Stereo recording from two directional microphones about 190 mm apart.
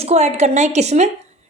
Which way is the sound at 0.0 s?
35° right (ahead or behind).